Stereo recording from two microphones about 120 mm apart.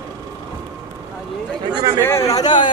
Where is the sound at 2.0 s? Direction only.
20° left (ahead or behind).